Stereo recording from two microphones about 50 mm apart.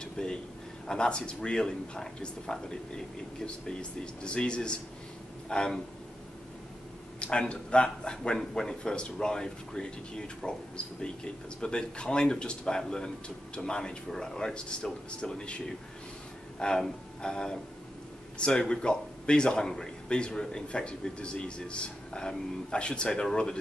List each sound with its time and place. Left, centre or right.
0.0 s a sound: centre
0.8 s a man's voice: centre
7.2 s a man's voice: left